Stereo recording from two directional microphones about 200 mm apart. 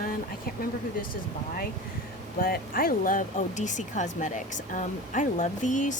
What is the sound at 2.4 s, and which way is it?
Speech, 45° left (ahead or behind).